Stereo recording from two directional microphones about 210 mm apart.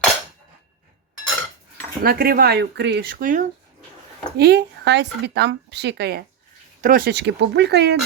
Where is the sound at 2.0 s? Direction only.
45° right (ahead or behind).